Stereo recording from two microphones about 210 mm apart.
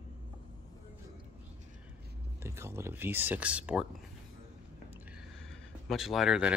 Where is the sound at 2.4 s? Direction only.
10° right (ahead or behind).